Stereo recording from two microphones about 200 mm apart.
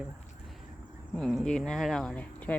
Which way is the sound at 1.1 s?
Centre (ahead or behind).